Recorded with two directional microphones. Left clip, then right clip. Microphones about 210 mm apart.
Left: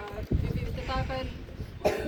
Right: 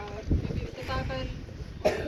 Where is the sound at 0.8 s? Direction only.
10° left (ahead or behind).